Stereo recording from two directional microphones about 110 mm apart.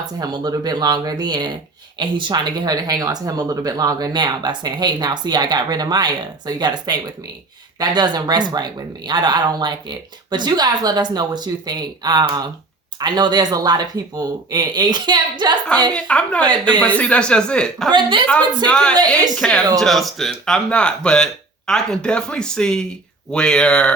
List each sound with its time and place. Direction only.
0.2 s speech: 35° right (ahead or behind)
15.9 s speech: 10° left (ahead or behind)
17.9 s a woman's voice: 50° right (ahead or behind)
18.7 s speech: 10° left (ahead or behind)